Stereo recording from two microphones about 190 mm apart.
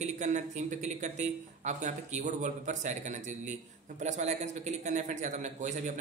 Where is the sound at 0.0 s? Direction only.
35° right (ahead or behind).